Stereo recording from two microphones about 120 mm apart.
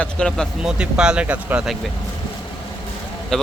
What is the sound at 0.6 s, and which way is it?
Speech, 5° right (ahead or behind).